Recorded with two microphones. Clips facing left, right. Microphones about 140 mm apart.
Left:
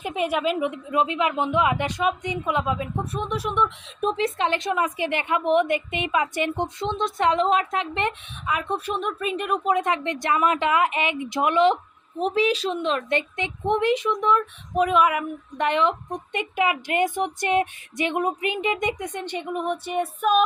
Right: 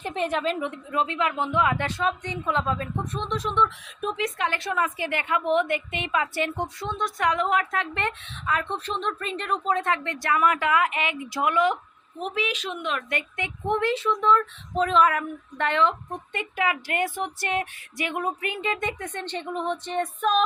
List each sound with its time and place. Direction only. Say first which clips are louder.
0.0 s a woman's voice: left 2 dB; 10° left (ahead or behind)
4.0 s a woman's voice: left 4 dB; 30° left (ahead or behind); by 20.4 s 10° left (ahead or behind)